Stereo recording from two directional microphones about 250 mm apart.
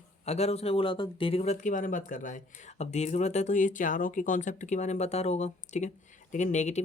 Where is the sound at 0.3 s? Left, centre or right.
Left.